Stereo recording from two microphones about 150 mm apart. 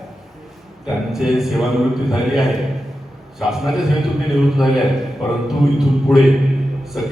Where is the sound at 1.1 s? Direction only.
Centre (ahead or behind).